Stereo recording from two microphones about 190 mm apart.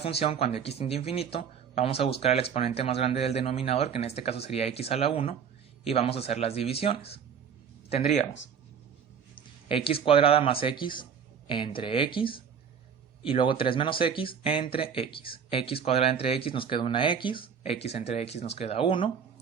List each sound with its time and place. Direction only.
0.0 s speech: 30° left (ahead or behind)
9.6 s speech: 30° left (ahead or behind)